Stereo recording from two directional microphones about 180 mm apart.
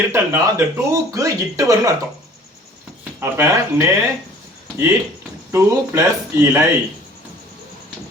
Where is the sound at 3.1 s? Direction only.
15° right (ahead or behind).